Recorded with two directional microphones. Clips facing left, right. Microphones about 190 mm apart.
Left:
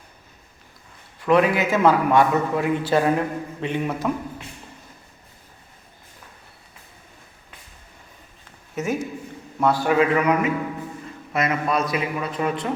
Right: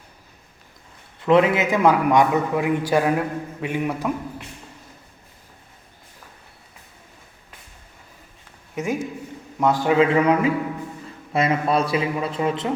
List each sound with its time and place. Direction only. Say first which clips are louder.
1.2 s a man's voice: right 1 dB; 20° right (ahead or behind)
8.7 s a man's voice: even; 15° right (ahead or behind)